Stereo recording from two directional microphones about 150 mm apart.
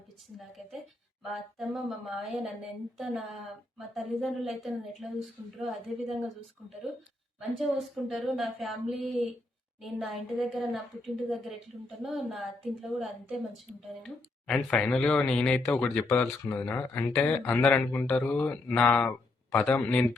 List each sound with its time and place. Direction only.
1.2 s a woman's voice: centre (ahead or behind)
7.3 s a woman's voice: centre (ahead or behind)